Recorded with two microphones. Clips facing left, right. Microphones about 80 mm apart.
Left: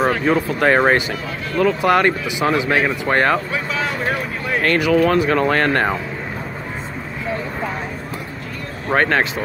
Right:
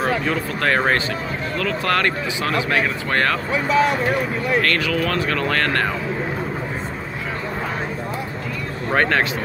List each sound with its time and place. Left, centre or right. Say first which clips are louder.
0.2 s speech: left 5 dB; centre
4.6 s speech: left 7 dB; centre
8.9 s speech: left 2 dB; centre